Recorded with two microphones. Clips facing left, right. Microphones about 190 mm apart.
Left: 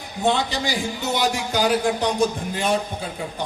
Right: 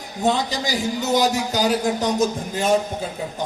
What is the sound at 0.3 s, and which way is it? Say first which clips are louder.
A man's voice: even; 40° right (ahead or behind).